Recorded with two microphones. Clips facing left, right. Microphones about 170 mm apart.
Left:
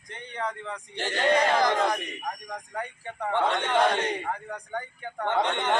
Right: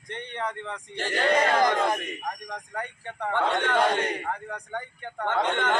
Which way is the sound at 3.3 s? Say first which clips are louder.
Even; 20° left (ahead or behind).